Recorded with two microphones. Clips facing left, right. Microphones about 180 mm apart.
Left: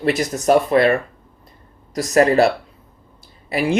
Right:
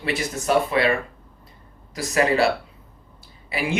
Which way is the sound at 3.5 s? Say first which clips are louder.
Left 6 dB; 40° left (ahead or behind).